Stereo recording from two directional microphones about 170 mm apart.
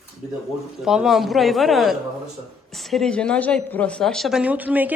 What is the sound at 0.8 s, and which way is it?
Speech, 5° right (ahead or behind).